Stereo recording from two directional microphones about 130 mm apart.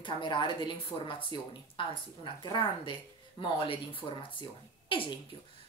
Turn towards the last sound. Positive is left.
turn(degrees=40)  # may be behind; listen again after turning